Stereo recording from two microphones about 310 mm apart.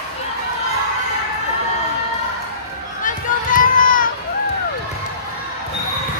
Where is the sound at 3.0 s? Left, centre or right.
Left.